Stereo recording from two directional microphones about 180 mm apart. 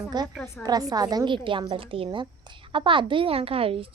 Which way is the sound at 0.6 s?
20° right (ahead or behind).